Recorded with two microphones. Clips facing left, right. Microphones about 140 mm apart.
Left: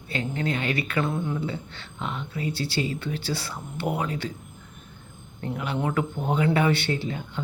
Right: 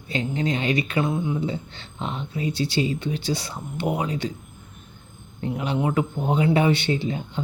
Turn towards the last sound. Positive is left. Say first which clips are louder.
# right 3 dB
turn(degrees=-20)  # may be behind; listen again after turning